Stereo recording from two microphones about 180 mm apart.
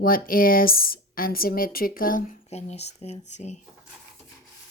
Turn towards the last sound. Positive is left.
turn(degrees=40)  # may be behind; listen again after turning